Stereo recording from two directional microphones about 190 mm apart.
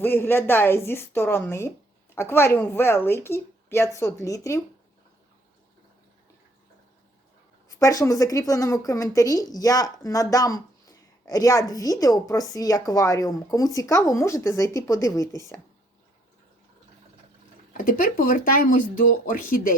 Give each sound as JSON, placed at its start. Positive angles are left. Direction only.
{"t": 0.0, "sound": "a woman's voice", "side_deg": 10}
{"t": 7.7, "sound": "a woman's voice", "side_deg": 15}
{"t": 17.8, "sound": "speech", "side_deg": 50}